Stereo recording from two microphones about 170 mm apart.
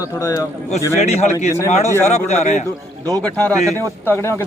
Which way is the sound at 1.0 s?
40° left (ahead or behind).